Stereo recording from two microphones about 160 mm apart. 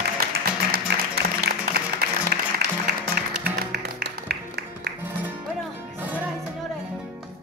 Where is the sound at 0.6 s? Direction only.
90° right.